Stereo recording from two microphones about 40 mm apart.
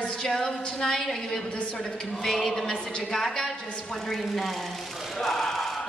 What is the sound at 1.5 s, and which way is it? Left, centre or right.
Speech, left.